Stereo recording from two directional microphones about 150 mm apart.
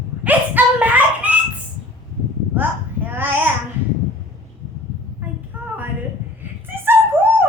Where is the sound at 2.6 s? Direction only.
10° right (ahead or behind).